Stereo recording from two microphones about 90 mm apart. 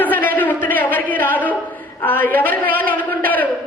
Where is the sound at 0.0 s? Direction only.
20° left (ahead or behind).